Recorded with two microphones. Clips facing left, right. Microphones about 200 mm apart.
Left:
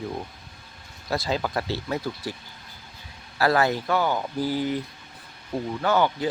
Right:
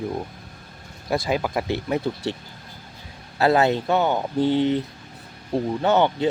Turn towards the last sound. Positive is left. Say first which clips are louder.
# right 3 dB
turn(degrees=-25)  # may be behind; listen again after turning